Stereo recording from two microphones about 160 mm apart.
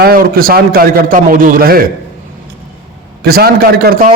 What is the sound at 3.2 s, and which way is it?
Speech, 75° right (ahead or behind).